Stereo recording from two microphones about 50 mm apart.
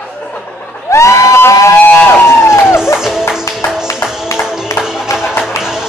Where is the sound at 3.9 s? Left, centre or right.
Left.